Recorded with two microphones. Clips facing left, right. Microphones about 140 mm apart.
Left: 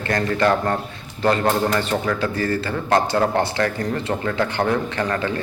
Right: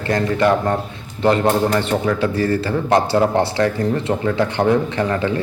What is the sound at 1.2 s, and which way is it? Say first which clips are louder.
Speech: right 3 dB; 25° right (ahead or behind).